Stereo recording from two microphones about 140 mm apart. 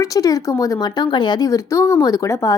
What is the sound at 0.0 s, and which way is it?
A woman's voice, 25° left (ahead or behind).